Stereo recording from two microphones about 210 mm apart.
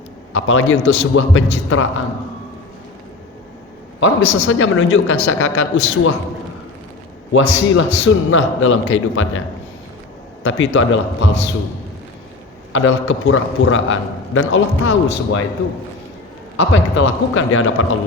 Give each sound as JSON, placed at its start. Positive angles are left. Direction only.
{"t": 0.3, "sound": "a man's voice", "side_deg": 75}
{"t": 4.0, "sound": "a woman's voice", "side_deg": 70}
{"t": 7.3, "sound": "a man's voice", "side_deg": 65}
{"t": 10.4, "sound": "a man's voice", "side_deg": 65}
{"t": 12.7, "sound": "a man's voice", "side_deg": 70}
{"t": 16.6, "sound": "a man's voice", "side_deg": 60}